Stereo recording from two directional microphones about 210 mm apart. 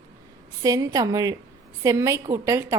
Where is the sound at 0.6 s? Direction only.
15° right (ahead or behind).